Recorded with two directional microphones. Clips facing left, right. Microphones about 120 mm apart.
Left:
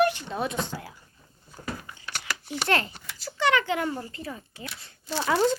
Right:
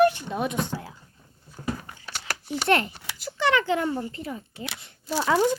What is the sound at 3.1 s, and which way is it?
A child's voice, 20° right (ahead or behind).